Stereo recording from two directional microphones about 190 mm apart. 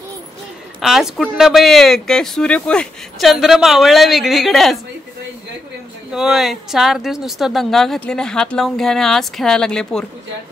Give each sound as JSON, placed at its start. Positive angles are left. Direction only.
{"t": 0.7, "sound": "speech", "side_deg": 0}
{"t": 6.1, "sound": "speech", "side_deg": 0}